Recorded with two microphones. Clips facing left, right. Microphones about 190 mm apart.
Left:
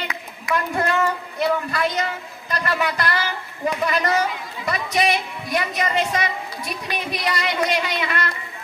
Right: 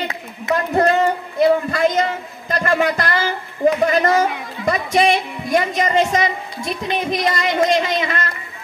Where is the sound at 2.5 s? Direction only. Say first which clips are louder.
Right 6 dB; 45° right (ahead or behind).